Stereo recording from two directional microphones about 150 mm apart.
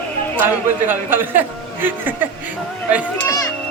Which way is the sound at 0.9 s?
15° right (ahead or behind).